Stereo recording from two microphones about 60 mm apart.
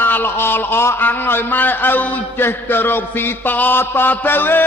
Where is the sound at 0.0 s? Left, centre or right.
Left.